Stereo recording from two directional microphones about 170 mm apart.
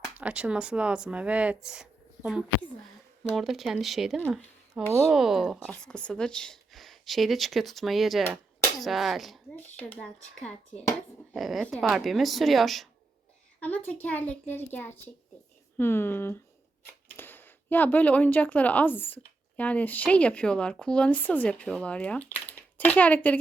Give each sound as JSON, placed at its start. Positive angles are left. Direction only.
{"t": 0.2, "sound": "a woman's voice", "side_deg": -5}
{"t": 4.9, "sound": "speech", "side_deg": -15}
{"t": 5.1, "sound": "a child's voice", "side_deg": -5}